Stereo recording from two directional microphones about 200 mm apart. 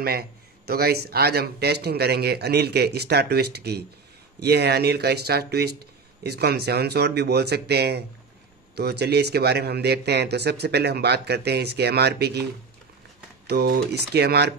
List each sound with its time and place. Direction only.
0.0 s a man's voice: 50° right (ahead or behind)
13.5 s speech: 55° right (ahead or behind)